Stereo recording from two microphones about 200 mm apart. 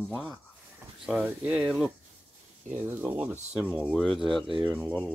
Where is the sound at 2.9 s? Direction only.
10° right (ahead or behind).